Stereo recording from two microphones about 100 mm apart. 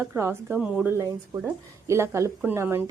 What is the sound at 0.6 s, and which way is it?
Speech, 10° right (ahead or behind).